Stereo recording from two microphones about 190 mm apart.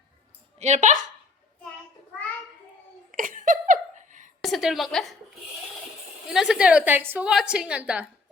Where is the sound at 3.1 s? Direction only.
45° right (ahead or behind).